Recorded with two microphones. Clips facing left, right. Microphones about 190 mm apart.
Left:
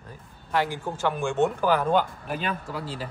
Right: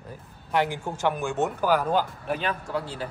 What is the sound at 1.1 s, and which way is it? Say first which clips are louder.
A man's voice: left 3 dB; 5° right (ahead or behind).